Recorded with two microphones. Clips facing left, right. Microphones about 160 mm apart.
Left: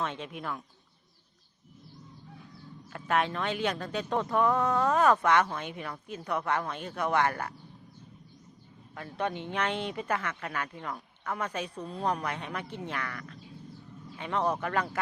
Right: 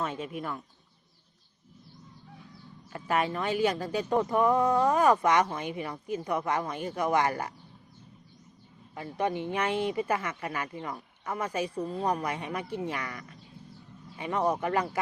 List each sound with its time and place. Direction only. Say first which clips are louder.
0.0 s speech: right 2 dB; 5° right (ahead or behind)
2.9 s speech: even; 10° right (ahead or behind)
9.0 s speech: right 3 dB; 10° right (ahead or behind)